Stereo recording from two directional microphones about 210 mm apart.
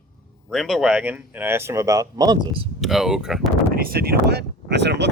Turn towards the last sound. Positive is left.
turn(degrees=-55)  # may be behind; listen again after turning